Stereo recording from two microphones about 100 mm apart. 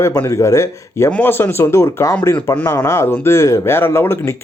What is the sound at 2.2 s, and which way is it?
Speech, 15° left (ahead or behind).